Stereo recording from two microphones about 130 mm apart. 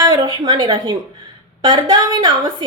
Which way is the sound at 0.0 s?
30° right (ahead or behind).